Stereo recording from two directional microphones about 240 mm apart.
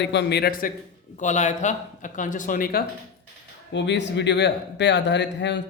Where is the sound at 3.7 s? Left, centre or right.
Left.